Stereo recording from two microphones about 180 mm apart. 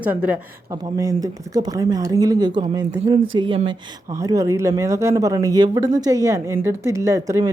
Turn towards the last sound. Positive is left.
turn(degrees=-15)  # may be behind; listen again after turning